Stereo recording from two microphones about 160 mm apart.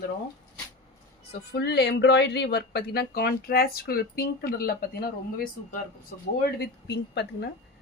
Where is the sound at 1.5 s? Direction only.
90° left; by 6.3 s 65° left (ahead or behind).